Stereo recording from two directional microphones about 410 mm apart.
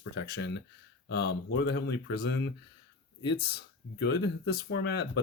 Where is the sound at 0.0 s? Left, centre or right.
Left.